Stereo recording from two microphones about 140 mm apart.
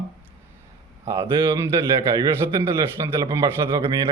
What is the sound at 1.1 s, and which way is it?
A man's voice, 20° right (ahead or behind).